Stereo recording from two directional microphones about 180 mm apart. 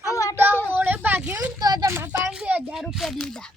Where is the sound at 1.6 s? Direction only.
20° right (ahead or behind); by 3.5 s 5° left (ahead or behind).